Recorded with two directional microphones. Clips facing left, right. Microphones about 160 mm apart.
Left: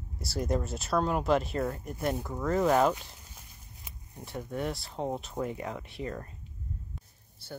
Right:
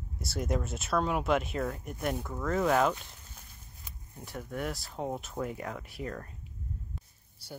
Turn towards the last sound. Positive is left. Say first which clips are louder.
# left 2 dB
turn(degrees=-5)  # may be behind; listen again after turning